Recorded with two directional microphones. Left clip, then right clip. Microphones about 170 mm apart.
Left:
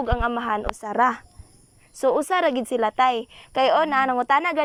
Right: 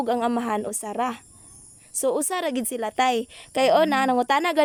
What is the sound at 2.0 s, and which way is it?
A woman's voice, 20° right (ahead or behind).